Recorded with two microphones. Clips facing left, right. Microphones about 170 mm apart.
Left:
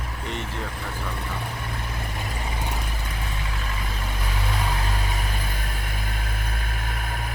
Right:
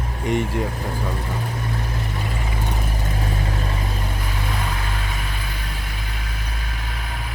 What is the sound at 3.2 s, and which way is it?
Vehicle, 40° right (ahead or behind).